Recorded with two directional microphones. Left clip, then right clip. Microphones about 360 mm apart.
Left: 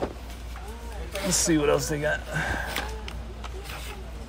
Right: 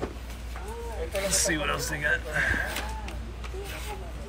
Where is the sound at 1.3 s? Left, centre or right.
Centre.